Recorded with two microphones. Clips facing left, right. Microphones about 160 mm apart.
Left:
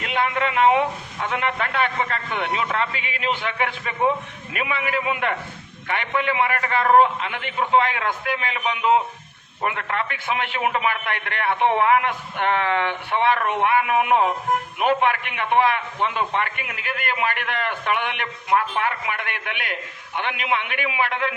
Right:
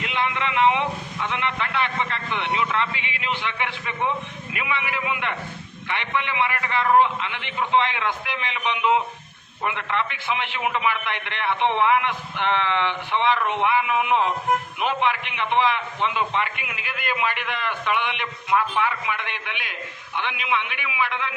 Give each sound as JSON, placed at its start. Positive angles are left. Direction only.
{"t": 0.0, "sound": "a man's voice", "side_deg": 45}